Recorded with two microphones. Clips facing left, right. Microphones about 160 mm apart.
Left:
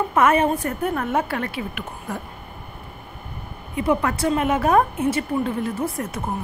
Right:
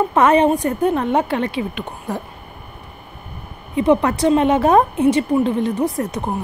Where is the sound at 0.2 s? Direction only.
20° right (ahead or behind).